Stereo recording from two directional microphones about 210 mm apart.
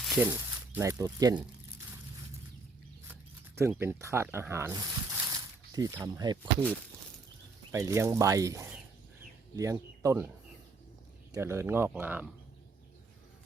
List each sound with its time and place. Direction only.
0.0 s snake: centre (ahead or behind)
0.3 s speech: 15° right (ahead or behind)
3.6 s speech: 10° right (ahead or behind)
7.7 s speech: 15° right (ahead or behind)
11.3 s speech: 10° right (ahead or behind)